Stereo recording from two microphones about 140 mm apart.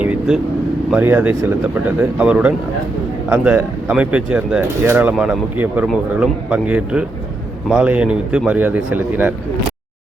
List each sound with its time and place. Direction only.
0.0 s vehicle: 10° right (ahead or behind)
0.9 s speech: 10° right (ahead or behind)